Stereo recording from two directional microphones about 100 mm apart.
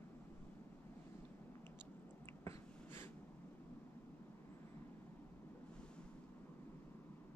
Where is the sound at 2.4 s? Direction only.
20° left (ahead or behind).